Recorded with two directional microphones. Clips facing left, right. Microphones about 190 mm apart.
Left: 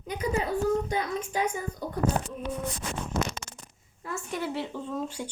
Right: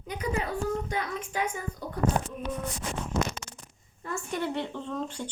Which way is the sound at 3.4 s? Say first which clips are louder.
Left 1 dB; 50° left (ahead or behind).